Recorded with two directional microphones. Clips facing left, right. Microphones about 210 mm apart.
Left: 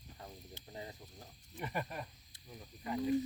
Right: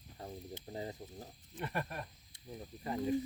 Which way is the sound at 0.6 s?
30° right (ahead or behind).